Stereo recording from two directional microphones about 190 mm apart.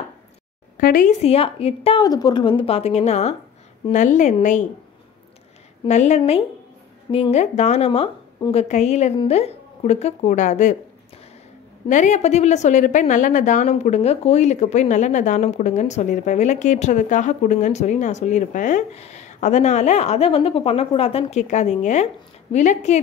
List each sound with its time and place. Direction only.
0.7 s a woman's voice: 45° left (ahead or behind)
5.9 s a woman's voice: 35° left (ahead or behind)
11.9 s a woman's voice: 40° left (ahead or behind)